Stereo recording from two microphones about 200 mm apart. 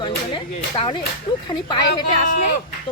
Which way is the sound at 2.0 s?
40° left (ahead or behind).